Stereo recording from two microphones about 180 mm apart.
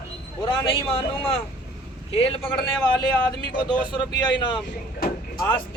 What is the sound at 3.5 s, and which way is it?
A man's voice, 25° left (ahead or behind).